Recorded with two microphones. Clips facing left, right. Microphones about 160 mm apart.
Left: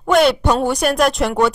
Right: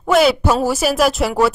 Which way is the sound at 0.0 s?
Centre (ahead or behind).